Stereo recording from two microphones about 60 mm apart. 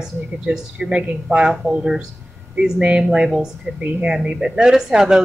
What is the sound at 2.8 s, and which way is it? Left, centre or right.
Speech, centre.